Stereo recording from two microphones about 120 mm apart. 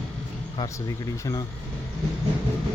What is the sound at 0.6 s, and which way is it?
Speech, 25° left (ahead or behind).